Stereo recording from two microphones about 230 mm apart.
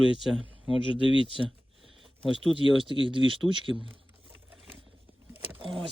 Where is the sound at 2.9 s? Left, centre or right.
Right.